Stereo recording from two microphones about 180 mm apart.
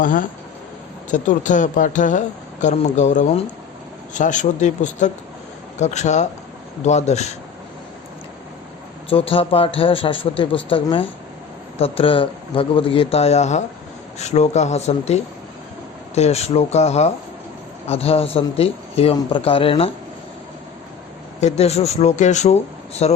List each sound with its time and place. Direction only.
0.0 s speech: 45° left (ahead or behind)
9.0 s a man's voice: 30° left (ahead or behind)
21.4 s speech: 35° left (ahead or behind)